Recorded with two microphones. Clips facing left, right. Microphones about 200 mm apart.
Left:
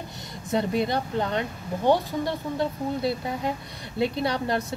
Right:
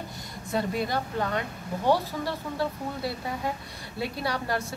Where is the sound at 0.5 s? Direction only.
20° left (ahead or behind).